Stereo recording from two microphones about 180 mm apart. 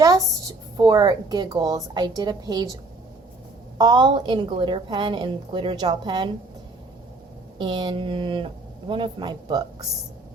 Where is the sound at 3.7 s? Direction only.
20° right (ahead or behind).